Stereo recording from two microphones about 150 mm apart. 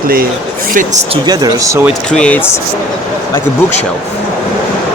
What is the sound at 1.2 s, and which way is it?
Speech, 25° right (ahead or behind).